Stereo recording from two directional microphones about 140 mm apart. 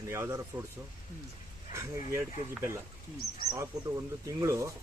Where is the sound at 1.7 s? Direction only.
20° right (ahead or behind).